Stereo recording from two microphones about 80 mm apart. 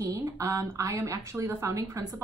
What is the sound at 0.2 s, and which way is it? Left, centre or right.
A woman's voice, right.